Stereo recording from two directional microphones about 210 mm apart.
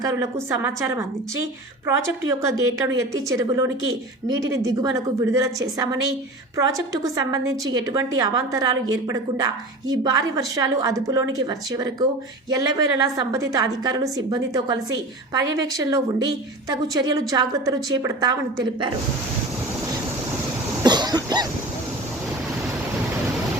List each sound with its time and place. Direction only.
0.0 s a woman's voice: 15° right (ahead or behind)
2.4 s a woman's voice: 15° right (ahead or behind)
20.8 s cough: 20° right (ahead or behind)